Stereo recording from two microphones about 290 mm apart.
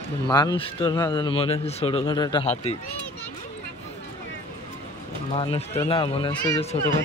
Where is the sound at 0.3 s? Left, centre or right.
Centre.